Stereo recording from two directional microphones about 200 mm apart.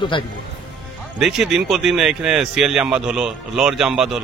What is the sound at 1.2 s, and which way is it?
Speech, centre (ahead or behind).